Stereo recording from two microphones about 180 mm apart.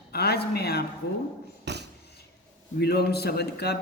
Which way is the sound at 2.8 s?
60° left (ahead or behind).